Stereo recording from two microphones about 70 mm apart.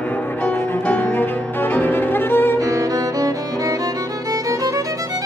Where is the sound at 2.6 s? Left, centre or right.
Right.